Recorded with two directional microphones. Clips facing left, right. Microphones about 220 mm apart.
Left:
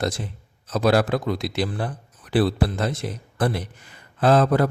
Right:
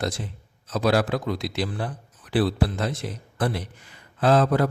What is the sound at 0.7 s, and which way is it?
A man's voice, 50° left (ahead or behind).